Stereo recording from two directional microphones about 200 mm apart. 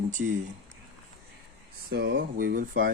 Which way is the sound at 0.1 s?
40° right (ahead or behind).